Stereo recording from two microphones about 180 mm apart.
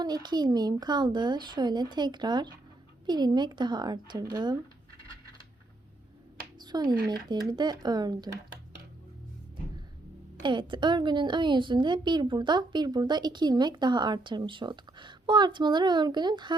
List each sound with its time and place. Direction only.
0.0 s a woman's voice: 25° right (ahead or behind)
6.6 s a sound: 25° right (ahead or behind)
7.1 s a woman's voice: 25° right (ahead or behind)
10.4 s a woman's voice: 25° right (ahead or behind)